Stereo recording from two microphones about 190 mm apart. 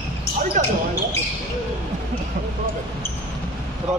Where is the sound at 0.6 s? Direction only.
40° right (ahead or behind).